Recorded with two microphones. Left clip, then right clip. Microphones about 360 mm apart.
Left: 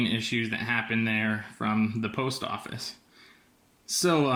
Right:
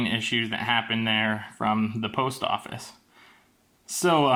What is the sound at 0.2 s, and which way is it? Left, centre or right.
Speech, centre.